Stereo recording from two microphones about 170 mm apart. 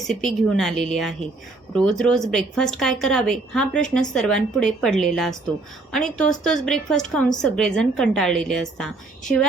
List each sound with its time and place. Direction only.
0.0 s a woman's voice: centre (ahead or behind)